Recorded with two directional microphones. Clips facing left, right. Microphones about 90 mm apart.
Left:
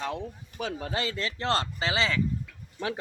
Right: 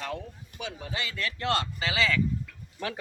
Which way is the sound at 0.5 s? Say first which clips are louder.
Left 4 dB; 40° left (ahead or behind).